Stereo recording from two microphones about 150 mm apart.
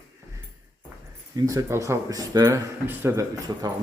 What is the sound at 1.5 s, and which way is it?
Speech, 20° right (ahead or behind).